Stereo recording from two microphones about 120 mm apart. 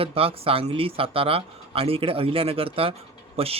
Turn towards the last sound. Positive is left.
turn(degrees=-55)  # may be behind; listen again after turning